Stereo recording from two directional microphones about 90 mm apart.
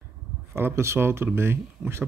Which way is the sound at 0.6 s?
30° right (ahead or behind).